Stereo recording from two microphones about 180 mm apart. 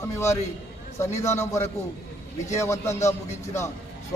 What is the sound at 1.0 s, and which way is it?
A man's voice, 15° left (ahead or behind).